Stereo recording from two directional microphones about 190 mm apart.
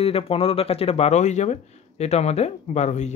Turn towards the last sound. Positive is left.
turn(degrees=35)  # may be behind; listen again after turning